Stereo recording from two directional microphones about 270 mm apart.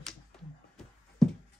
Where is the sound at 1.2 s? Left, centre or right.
Centre.